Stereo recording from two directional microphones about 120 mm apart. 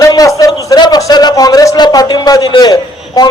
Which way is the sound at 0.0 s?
30° left (ahead or behind).